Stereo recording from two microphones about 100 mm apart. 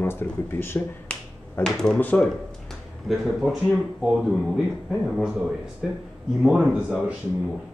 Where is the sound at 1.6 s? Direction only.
5° left (ahead or behind).